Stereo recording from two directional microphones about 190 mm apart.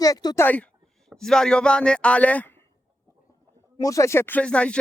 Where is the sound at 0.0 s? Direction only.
20° left (ahead or behind).